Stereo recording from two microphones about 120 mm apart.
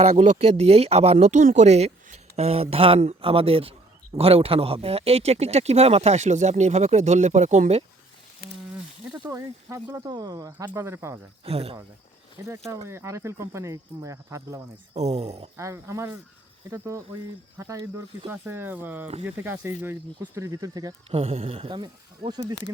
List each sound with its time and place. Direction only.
0.0 s speech: 65° right (ahead or behind)
9.3 s speech: 25° right (ahead or behind)
11.4 s speech: 55° right (ahead or behind)
12.5 s speech: 25° right (ahead or behind)
14.9 s speech: 65° right (ahead or behind)
15.5 s speech: 25° right (ahead or behind)
21.1 s speech: 55° right (ahead or behind); by 22.5 s 40° right (ahead or behind)